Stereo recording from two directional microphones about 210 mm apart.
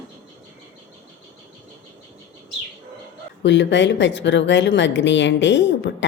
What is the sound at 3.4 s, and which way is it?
A woman's voice, 60° left (ahead or behind).